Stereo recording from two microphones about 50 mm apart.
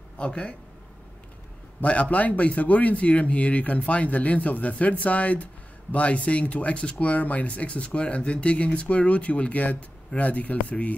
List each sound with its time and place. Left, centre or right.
0.2 s speech: left
1.8 s speech: left